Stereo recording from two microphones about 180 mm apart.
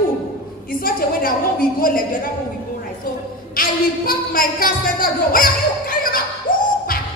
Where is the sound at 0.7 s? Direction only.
55° left (ahead or behind).